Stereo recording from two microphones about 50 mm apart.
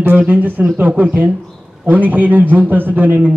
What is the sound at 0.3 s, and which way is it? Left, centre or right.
A man's voice, right.